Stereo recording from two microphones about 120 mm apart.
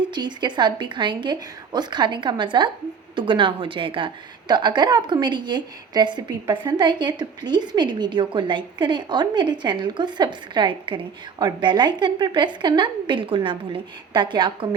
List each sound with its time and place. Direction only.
0.0 s a woman's voice: 40° right (ahead or behind)